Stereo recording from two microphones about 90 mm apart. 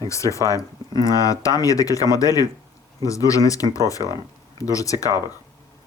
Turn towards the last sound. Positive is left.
turn(degrees=40)  # may be behind; listen again after turning